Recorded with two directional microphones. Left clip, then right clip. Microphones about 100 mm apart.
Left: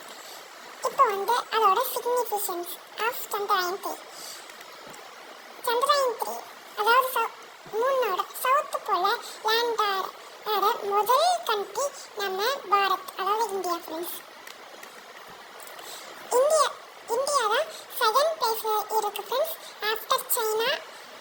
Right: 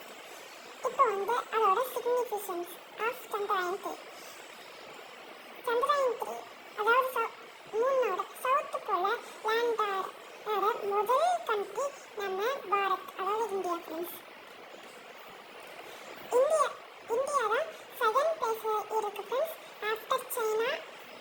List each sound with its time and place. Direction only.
0.8 s speech: 55° left (ahead or behind)
2.1 s a child's voice: 70° left (ahead or behind)
3.0 s a child's voice: 50° left (ahead or behind); by 3.9 s 65° left (ahead or behind)
5.9 s a child's voice: 70° left (ahead or behind)
6.7 s a child's voice: 55° left (ahead or behind)
16.3 s a sound: 65° left (ahead or behind)
18.0 s a child's voice: 60° left (ahead or behind)